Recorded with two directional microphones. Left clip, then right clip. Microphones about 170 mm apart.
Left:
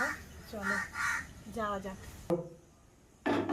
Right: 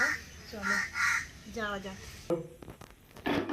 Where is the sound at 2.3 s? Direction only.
Centre (ahead or behind).